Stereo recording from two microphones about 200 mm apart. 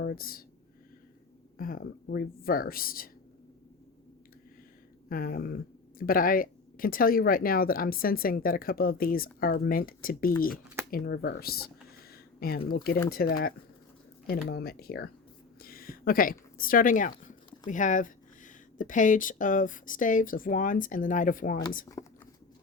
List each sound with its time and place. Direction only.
0.0 s speech: 50° left (ahead or behind)
1.5 s speech: 45° left (ahead or behind)
5.0 s speech: 45° left (ahead or behind)
14.5 s speech: 50° left (ahead or behind)
22.0 s speech: 20° left (ahead or behind)